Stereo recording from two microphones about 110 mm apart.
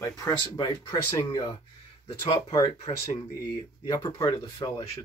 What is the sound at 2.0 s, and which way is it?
Speech, 55° left (ahead or behind).